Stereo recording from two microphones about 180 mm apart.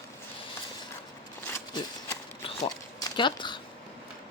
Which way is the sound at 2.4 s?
25° left (ahead or behind).